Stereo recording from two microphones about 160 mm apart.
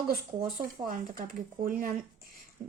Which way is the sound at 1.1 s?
60° right (ahead or behind).